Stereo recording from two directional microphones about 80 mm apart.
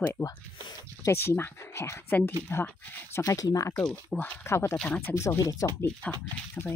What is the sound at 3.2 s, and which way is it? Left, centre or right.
Speech, left.